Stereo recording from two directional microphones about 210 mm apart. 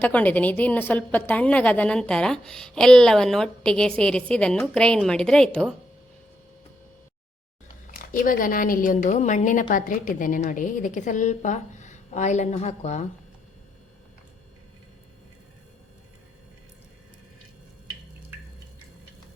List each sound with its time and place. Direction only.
0.0 s a woman's voice: 5° left (ahead or behind)
7.9 s a woman's voice: 40° left (ahead or behind)